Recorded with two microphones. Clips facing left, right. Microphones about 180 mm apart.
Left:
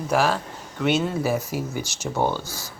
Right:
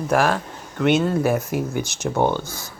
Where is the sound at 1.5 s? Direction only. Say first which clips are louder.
Right 4 dB; 55° right (ahead or behind).